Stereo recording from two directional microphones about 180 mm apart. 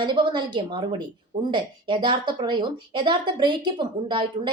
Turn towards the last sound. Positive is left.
turn(degrees=-25)  # may be behind; listen again after turning